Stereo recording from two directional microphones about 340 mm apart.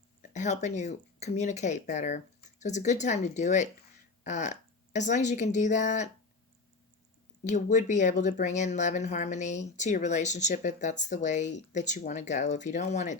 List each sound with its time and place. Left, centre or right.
0.2 s speech: left
7.4 s speech: left